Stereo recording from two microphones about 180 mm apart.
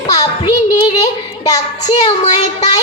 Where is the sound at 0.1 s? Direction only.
20° left (ahead or behind).